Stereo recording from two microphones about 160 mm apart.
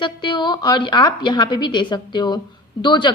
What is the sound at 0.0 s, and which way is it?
A woman's voice, 30° left (ahead or behind).